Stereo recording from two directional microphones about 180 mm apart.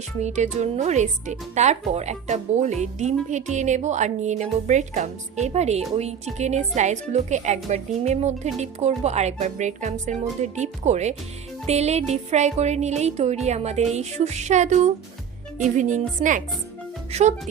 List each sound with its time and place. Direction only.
0.2 s a woman's voice: 40° right (ahead or behind)